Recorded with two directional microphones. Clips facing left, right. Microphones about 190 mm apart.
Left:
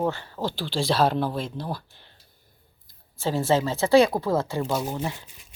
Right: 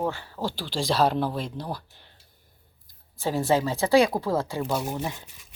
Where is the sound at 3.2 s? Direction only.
15° right (ahead or behind).